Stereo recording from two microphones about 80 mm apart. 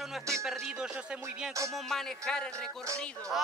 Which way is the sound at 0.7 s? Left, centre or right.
Centre.